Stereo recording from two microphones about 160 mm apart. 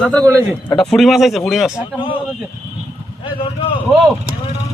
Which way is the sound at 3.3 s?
30° left (ahead or behind).